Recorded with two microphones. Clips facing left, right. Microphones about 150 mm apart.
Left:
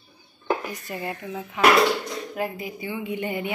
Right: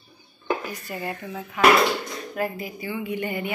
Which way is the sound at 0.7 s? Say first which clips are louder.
Even; 20° left (ahead or behind).